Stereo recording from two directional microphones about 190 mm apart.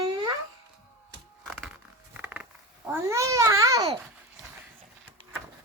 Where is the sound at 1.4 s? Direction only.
5° right (ahead or behind).